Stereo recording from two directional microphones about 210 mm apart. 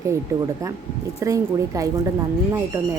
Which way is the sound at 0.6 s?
15° right (ahead or behind).